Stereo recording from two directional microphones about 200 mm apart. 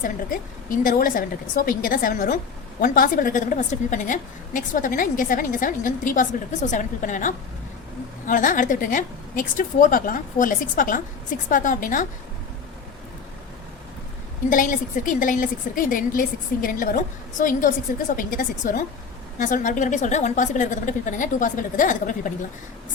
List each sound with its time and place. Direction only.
0.0 s a woman's voice: 45° left (ahead or behind)
14.5 s a woman's voice: 40° left (ahead or behind)